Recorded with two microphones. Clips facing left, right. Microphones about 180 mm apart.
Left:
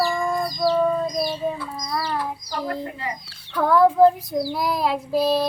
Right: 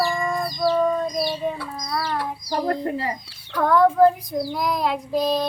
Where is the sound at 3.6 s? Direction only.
5° left (ahead or behind).